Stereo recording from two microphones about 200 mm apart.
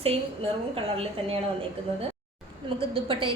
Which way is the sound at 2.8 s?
25° right (ahead or behind).